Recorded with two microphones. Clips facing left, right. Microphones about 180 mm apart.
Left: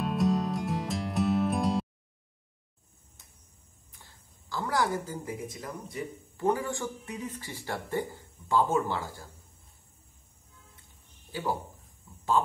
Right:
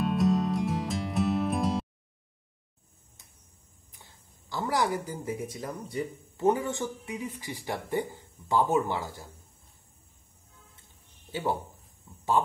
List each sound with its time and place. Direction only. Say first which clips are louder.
0.0 s music: right 2 dB; centre (ahead or behind)
3.9 s speech: right 1 dB; 20° right (ahead or behind)